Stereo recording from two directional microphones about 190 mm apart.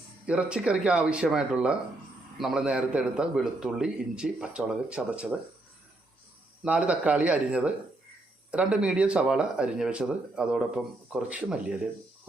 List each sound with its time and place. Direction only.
0.3 s speech: 5° right (ahead or behind)
6.7 s speech: 5° right (ahead or behind)